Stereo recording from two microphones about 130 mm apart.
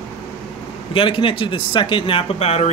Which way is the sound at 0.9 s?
40° left (ahead or behind).